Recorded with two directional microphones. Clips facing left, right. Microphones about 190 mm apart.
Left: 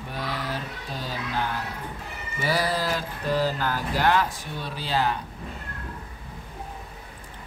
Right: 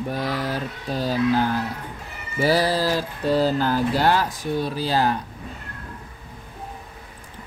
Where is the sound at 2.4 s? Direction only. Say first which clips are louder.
Right 6 dB; 30° right (ahead or behind).